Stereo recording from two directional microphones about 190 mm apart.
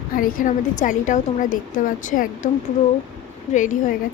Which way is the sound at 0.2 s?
45° left (ahead or behind).